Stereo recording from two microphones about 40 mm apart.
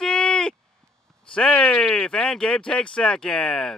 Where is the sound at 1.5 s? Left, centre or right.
Left.